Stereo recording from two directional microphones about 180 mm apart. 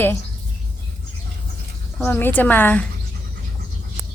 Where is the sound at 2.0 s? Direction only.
10° left (ahead or behind).